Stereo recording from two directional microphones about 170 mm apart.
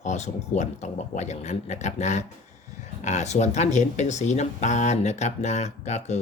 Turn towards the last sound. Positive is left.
turn(degrees=45)  # may be behind; listen again after turning